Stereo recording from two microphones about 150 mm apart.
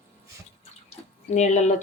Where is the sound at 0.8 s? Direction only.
50° left (ahead or behind).